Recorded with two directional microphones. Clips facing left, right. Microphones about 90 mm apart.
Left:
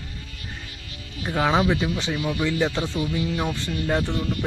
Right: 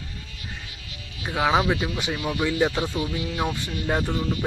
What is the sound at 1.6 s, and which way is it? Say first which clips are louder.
Speech: left 1 dB; 20° right (ahead or behind).